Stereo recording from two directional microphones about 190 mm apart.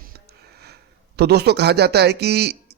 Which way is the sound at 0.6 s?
60° right (ahead or behind).